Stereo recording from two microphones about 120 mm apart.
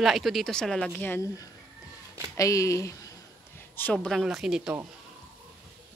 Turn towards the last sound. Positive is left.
turn(degrees=-5)  # may be behind; listen again after turning